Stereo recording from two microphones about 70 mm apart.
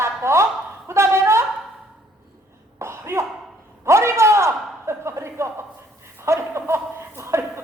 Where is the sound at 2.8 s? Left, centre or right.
Right.